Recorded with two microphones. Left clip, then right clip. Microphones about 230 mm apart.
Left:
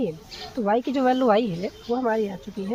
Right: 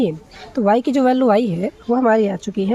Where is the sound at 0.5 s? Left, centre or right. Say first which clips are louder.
Right 7 dB; right.